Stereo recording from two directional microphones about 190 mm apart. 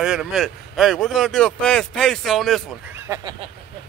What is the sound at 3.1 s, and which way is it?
Speech, 25° right (ahead or behind).